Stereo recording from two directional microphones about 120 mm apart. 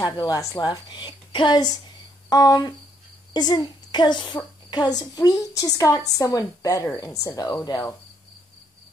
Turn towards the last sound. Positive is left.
turn(degrees=30)  # may be behind; listen again after turning